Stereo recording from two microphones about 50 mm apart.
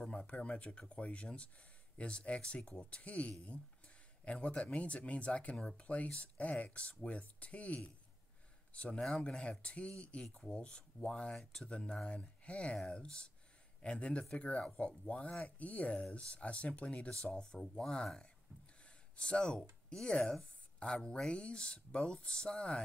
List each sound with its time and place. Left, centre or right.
0.0 s speech: left
17.1 s speech: centre